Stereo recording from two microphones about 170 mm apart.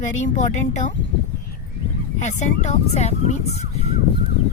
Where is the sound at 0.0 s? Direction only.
45° left (ahead or behind).